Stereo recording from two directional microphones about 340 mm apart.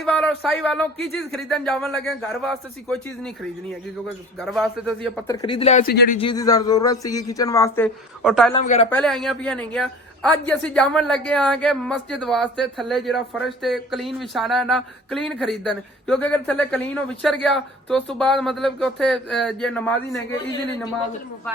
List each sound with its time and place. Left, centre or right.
0.0 s a man's voice: centre
4.4 s a man's voice: centre; by 6.0 s left
6.1 s a man's voice: centre
8.5 s a man's voice: centre
8.9 s a man's voice: centre